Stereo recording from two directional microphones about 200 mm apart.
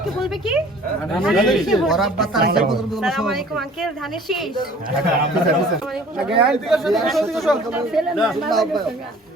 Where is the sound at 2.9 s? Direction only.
Centre (ahead or behind).